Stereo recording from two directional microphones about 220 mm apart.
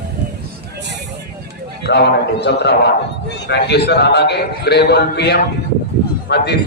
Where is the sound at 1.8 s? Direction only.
50° left (ahead or behind).